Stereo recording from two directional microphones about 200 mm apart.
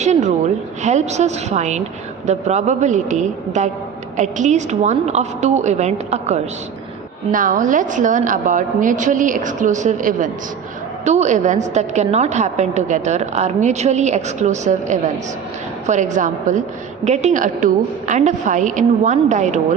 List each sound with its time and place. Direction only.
0.0 s a woman's voice: 35° right (ahead or behind)